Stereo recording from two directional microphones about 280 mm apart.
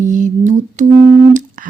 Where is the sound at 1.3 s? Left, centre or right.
Right.